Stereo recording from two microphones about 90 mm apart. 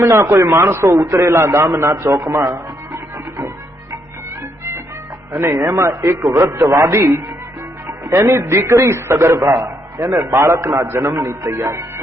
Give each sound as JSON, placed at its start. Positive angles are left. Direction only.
{"t": 0.0, "sound": "a man's voice", "side_deg": -35}
{"t": 5.5, "sound": "a man's voice", "side_deg": -40}